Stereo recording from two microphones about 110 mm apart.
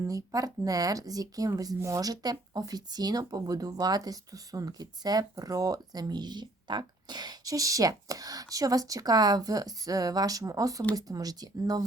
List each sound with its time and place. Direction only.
0.0 s speech: 30° right (ahead or behind)